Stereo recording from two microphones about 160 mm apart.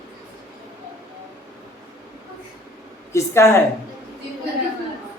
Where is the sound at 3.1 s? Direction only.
15° left (ahead or behind).